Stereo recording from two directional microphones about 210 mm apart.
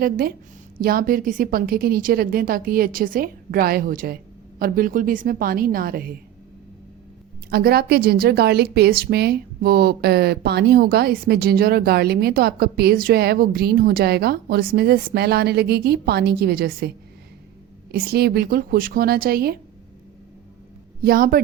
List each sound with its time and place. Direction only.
0.0 s a woman's voice: 45° right (ahead or behind)
7.5 s a woman's voice: 45° right (ahead or behind)
17.9 s a woman's voice: 45° right (ahead or behind)
21.0 s a woman's voice: 45° right (ahead or behind)